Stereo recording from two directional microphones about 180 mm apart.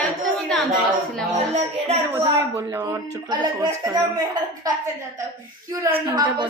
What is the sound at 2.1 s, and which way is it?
Speech, 15° right (ahead or behind).